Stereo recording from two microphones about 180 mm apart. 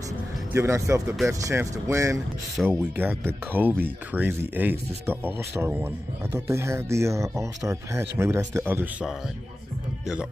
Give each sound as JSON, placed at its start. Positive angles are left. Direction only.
{"t": 0.5, "sound": "speech", "side_deg": -15}
{"t": 2.5, "sound": "speech", "side_deg": 0}
{"t": 3.0, "sound": "speech", "side_deg": -10}